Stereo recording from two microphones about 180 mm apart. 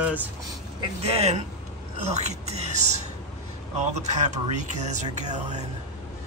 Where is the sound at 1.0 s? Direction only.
35° right (ahead or behind).